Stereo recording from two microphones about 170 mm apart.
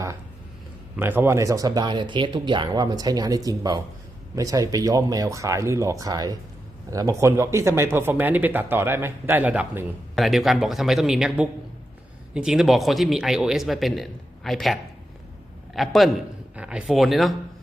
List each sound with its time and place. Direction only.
0.9 s a man's voice: 10° right (ahead or behind)